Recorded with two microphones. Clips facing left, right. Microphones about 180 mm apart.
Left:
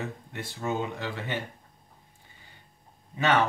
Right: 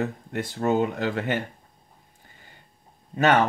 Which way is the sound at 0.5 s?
65° right (ahead or behind).